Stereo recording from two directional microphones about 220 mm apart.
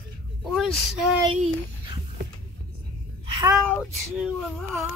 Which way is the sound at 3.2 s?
20° right (ahead or behind).